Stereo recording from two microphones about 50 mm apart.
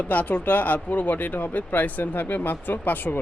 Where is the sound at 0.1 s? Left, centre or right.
Left.